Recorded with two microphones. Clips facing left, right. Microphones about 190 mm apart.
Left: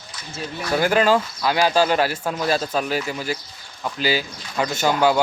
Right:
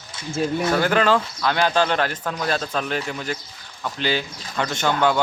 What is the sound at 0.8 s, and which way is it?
Speech, 10° left (ahead or behind).